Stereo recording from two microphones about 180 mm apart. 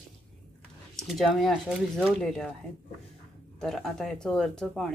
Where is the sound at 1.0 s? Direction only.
Centre (ahead or behind).